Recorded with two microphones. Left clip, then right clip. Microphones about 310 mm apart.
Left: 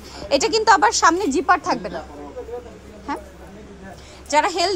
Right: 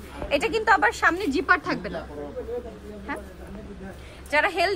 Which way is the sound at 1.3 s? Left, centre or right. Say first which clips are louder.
Left 4 dB; centre.